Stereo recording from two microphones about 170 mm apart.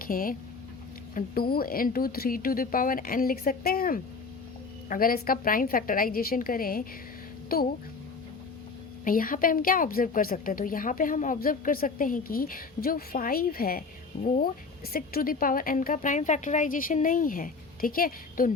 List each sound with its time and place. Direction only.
0.0 s a woman's voice: 55° left (ahead or behind)
9.0 s a woman's voice: 55° left (ahead or behind)
14.1 s speech: 40° left (ahead or behind)
14.9 s a woman's voice: 60° left (ahead or behind)